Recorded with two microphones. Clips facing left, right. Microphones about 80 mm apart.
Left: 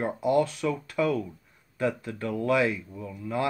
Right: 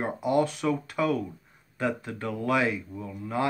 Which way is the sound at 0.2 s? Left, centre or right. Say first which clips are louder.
Left 1 dB; right.